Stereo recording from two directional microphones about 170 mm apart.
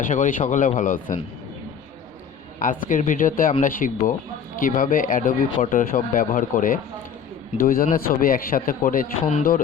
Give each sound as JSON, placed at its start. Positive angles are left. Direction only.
{"t": 0.0, "sound": "speech", "side_deg": 50}
{"t": 2.6, "sound": "a man's voice", "side_deg": 50}